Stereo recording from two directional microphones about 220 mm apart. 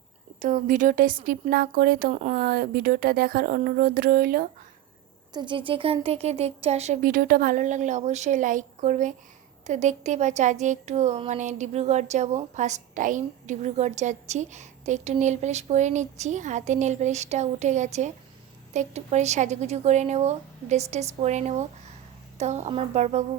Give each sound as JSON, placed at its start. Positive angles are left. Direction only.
{"t": 0.3, "sound": "speech", "side_deg": -35}
{"t": 5.3, "sound": "speech", "side_deg": -20}